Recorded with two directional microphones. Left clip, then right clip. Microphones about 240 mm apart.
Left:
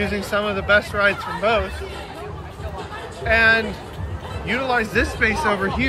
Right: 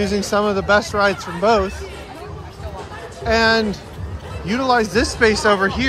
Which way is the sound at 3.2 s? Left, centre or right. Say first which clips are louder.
Even; centre.